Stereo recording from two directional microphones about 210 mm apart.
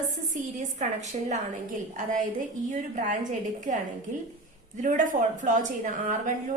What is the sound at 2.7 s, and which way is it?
A woman's voice, 40° right (ahead or behind).